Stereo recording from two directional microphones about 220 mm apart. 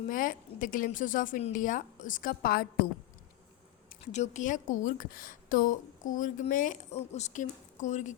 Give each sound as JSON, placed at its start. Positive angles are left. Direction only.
{"t": 0.1, "sound": "a woman's voice", "side_deg": 40}
{"t": 3.8, "sound": "a woman's voice", "side_deg": 35}